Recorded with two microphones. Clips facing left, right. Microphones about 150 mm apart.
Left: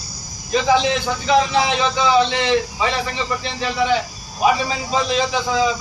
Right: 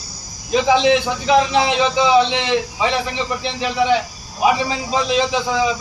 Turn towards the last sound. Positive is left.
turn(degrees=-15)  # may be behind; listen again after turning